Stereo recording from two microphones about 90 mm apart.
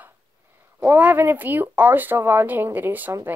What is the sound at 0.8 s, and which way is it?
Speech, 20° right (ahead or behind).